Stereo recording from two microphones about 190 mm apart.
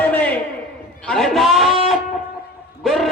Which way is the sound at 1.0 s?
Centre (ahead or behind).